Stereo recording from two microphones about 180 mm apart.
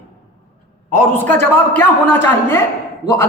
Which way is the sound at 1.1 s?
10° left (ahead or behind).